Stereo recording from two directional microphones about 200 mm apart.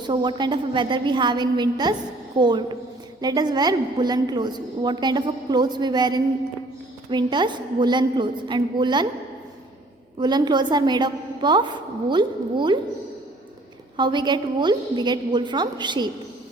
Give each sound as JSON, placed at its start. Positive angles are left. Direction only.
{"t": 0.0, "sound": "a woman's voice", "side_deg": -20}
{"t": 10.2, "sound": "a woman's voice", "side_deg": -20}
{"t": 13.9, "sound": "a woman's voice", "side_deg": -20}